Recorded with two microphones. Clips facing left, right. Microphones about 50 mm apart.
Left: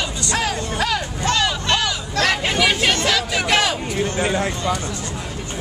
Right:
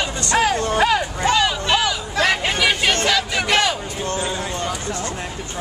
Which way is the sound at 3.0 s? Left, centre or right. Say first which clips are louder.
Even; centre.